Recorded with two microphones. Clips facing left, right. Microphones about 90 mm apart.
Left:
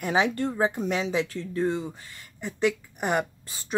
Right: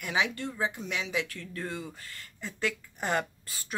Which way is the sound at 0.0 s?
35° left (ahead or behind).